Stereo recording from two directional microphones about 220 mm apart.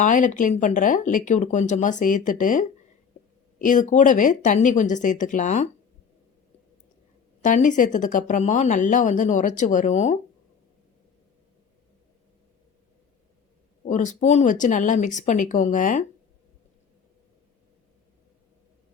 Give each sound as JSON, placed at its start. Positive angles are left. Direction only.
{"t": 0.0, "sound": "speech", "side_deg": 35}
{"t": 7.4, "sound": "speech", "side_deg": 35}
{"t": 13.8, "sound": "speech", "side_deg": 35}